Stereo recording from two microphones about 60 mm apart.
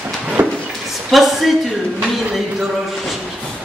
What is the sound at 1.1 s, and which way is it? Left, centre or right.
Speech, centre.